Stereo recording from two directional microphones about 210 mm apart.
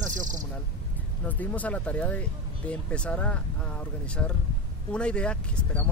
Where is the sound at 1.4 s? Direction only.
5° left (ahead or behind).